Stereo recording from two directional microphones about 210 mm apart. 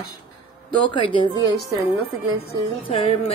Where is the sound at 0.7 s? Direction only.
25° left (ahead or behind).